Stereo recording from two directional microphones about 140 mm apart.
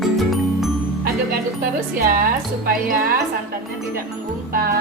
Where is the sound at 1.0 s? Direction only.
90° right.